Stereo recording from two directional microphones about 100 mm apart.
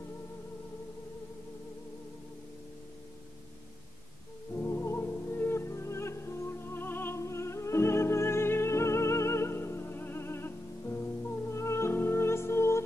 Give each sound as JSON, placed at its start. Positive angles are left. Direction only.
{"t": 4.6, "sound": "music", "side_deg": 25}
{"t": 11.5, "sound": "music", "side_deg": 30}